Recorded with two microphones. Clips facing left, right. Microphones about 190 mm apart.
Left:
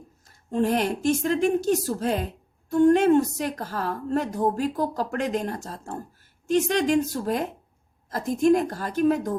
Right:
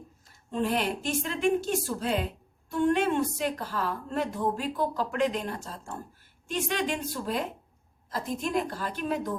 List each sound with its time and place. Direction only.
0.3 s a woman's voice: 45° left (ahead or behind)